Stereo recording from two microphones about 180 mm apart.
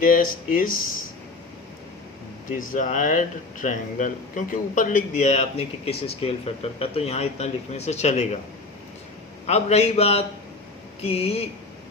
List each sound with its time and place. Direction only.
0.0 s speech: 50° left (ahead or behind)
2.5 s speech: 45° left (ahead or behind)
9.5 s speech: 35° left (ahead or behind)